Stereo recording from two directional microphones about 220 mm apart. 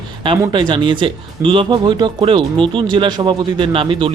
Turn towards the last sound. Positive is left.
turn(degrees=-25)  # may be behind; listen again after turning